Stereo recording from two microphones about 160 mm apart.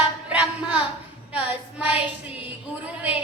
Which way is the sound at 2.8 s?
10° right (ahead or behind).